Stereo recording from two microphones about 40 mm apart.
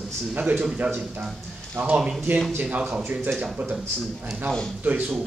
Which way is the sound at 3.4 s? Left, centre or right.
Right.